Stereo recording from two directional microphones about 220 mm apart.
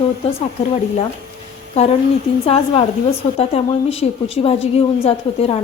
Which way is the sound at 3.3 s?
25° left (ahead or behind).